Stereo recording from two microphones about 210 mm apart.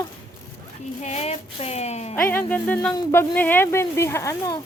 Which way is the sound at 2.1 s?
10° left (ahead or behind).